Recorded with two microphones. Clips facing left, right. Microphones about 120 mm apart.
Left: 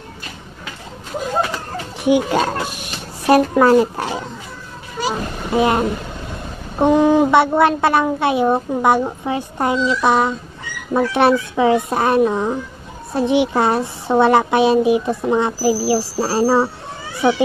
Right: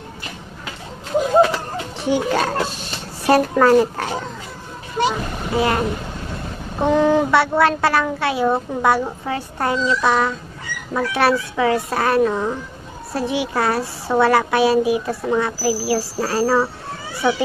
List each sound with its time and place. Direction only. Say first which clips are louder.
2.0 s a child's voice: left 4 dB; 15° left (ahead or behind)